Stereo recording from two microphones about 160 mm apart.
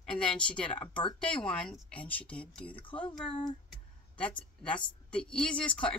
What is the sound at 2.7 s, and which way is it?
Speech, 30° left (ahead or behind).